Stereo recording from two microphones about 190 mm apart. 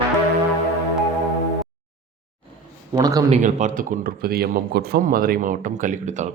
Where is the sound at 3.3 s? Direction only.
40° right (ahead or behind).